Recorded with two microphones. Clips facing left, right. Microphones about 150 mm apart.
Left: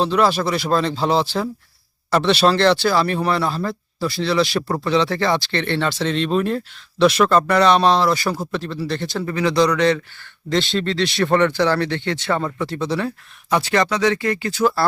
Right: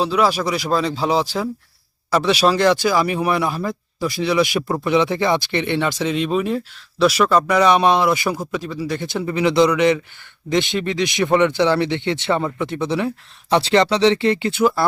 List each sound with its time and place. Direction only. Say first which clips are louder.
0.0 s speech: even; 10° right (ahead or behind); by 14.5 s 25° right (ahead or behind)